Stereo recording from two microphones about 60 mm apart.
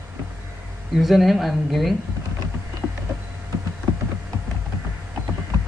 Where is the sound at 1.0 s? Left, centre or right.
Centre.